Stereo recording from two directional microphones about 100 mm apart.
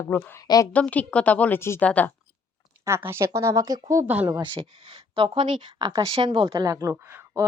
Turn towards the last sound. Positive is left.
turn(degrees=-20)  # may be behind; listen again after turning